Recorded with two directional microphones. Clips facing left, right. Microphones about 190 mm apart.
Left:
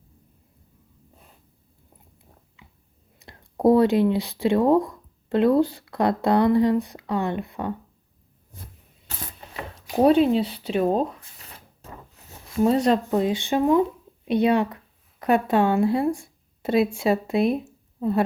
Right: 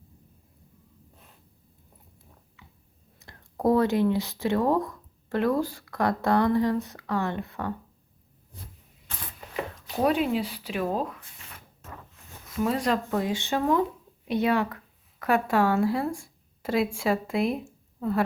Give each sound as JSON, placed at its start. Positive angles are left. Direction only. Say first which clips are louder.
{"t": 3.2, "sound": "speech", "louder": "left 6 dB", "side_deg": 20}
{"t": 9.9, "sound": "zipper", "louder": "left 7 dB", "side_deg": 30}
{"t": 12.5, "sound": "speech", "louder": "left 6 dB", "side_deg": 25}
{"t": 16.2, "sound": "a sound", "louder": "left 5 dB", "side_deg": 25}
{"t": 17.0, "sound": "speech", "louder": "left 4 dB", "side_deg": 25}